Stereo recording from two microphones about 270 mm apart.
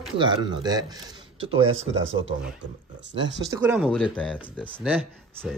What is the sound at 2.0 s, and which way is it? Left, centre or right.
Speech, right.